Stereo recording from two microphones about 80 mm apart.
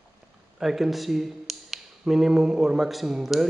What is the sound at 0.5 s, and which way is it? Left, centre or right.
Speech, centre.